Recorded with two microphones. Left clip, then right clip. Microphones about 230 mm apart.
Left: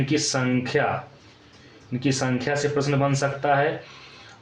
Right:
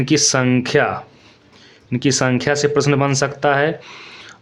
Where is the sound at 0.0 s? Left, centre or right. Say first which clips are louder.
Right 8 dB; right.